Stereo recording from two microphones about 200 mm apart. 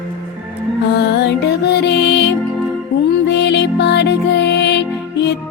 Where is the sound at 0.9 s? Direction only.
55° left (ahead or behind).